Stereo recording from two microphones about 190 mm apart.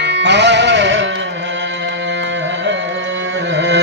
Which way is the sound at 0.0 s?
65° right (ahead or behind).